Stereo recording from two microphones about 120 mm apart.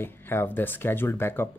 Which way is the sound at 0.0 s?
20° left (ahead or behind).